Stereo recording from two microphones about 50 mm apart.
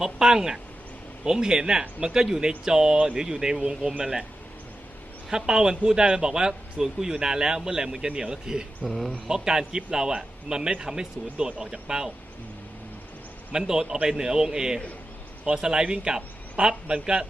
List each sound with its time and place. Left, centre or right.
0.0 s a man's voice: centre
5.3 s a man's voice: centre
9.3 s a man's voice: centre
13.5 s a man's voice: centre